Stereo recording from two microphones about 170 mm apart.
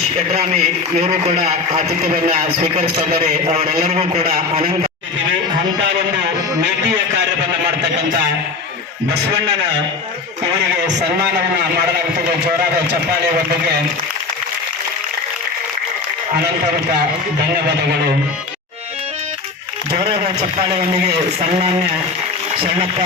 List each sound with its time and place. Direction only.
0.4 s a man's voice: 40° right (ahead or behind)
22.6 s a man's voice: 30° right (ahead or behind)